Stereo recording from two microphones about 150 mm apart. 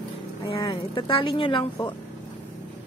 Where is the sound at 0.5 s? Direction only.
25° left (ahead or behind).